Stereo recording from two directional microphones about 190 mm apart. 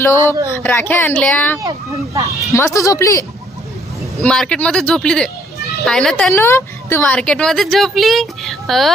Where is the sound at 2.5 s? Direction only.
15° left (ahead or behind).